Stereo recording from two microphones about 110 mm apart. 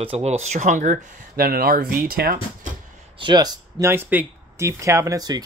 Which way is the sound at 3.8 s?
20° right (ahead or behind).